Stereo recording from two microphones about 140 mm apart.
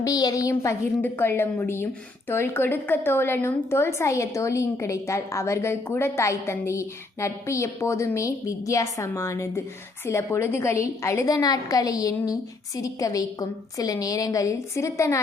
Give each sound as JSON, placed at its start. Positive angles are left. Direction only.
{"t": 0.0, "sound": "a woman's voice", "side_deg": 25}